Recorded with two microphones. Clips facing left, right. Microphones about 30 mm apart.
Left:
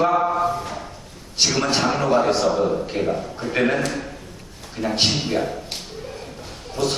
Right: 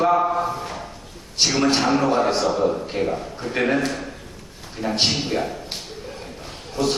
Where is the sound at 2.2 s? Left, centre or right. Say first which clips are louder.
Left 1 dB; centre.